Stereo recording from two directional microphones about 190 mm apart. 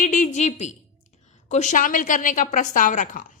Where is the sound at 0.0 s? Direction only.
40° left (ahead or behind).